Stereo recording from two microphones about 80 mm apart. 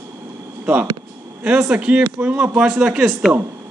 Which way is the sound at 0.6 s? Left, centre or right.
Centre.